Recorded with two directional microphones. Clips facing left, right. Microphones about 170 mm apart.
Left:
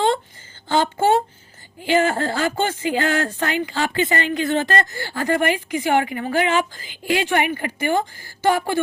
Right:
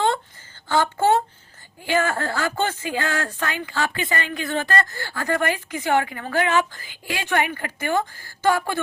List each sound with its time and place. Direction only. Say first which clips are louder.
0.7 s speech: left 1 dB; 20° left (ahead or behind)